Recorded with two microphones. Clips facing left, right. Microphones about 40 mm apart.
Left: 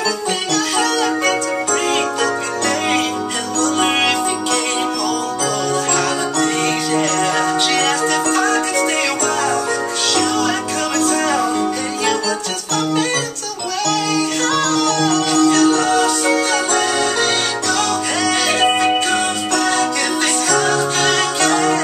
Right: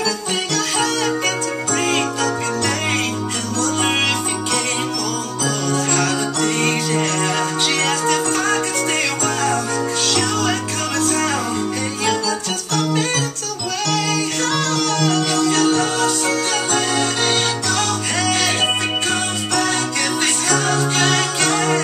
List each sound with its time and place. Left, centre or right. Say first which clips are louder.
0.7 s music: left 2 dB; centre
7.8 s music: left 2 dB; centre
10.1 s music: left 4 dB; centre
13.8 s music: left 3 dB; centre
15.9 s music: left 4 dB; centre
18.2 s music: left 2 dB; centre
20.5 s music: left 2 dB; centre
21.1 s jingle bell: left 2 dB; centre